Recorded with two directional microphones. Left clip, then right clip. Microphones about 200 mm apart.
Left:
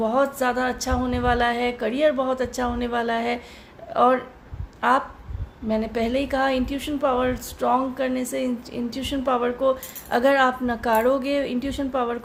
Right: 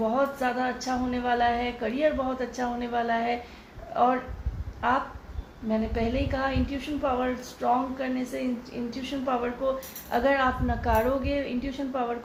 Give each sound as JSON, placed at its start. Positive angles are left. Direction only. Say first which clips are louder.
{"t": 0.1, "sound": "a woman's voice", "louder": "left 5 dB", "side_deg": 55}